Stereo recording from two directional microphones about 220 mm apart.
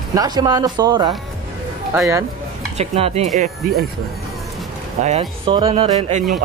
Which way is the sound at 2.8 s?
30° right (ahead or behind).